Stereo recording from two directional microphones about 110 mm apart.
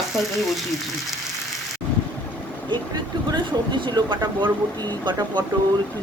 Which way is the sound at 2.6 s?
45° right (ahead or behind).